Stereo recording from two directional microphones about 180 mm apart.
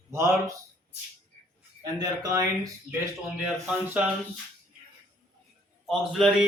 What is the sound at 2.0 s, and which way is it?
Speech, 20° right (ahead or behind).